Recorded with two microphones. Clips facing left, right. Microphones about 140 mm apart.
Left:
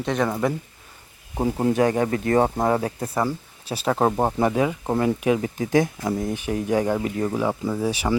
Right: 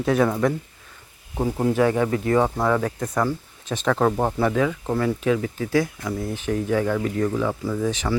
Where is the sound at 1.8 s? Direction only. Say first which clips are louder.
Right 2 dB; 40° left (ahead or behind).